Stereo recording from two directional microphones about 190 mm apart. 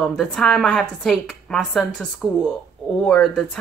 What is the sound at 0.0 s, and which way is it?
A woman's voice, 5° left (ahead or behind).